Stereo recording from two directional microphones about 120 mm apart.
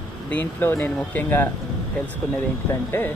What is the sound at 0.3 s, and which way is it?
Speech, 15° left (ahead or behind).